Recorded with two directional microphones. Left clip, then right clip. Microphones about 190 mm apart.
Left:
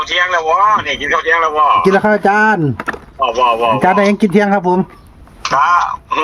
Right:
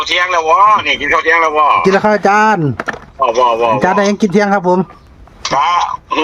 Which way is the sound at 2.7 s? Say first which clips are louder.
Right 1 dB; 20° right (ahead or behind).